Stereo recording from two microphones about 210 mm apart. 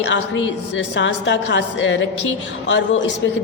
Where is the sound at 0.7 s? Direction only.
60° left (ahead or behind).